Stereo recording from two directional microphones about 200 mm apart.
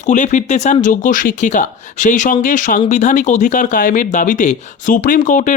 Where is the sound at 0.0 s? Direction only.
35° left (ahead or behind).